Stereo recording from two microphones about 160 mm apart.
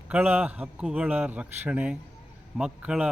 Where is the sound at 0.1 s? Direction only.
10° right (ahead or behind).